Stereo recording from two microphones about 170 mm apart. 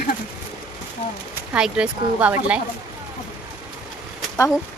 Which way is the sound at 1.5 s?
5° right (ahead or behind).